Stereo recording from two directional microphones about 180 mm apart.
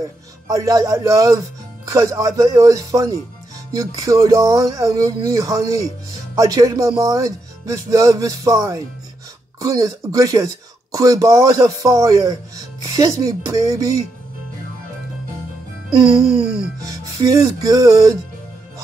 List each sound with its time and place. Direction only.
0.5 s speech: 20° right (ahead or behind)
16.0 s speech: 30° right (ahead or behind)
16.8 s speech: 20° right (ahead or behind)